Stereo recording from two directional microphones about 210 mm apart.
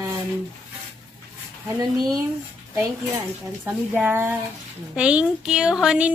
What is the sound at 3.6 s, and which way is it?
Speech, 10° right (ahead or behind).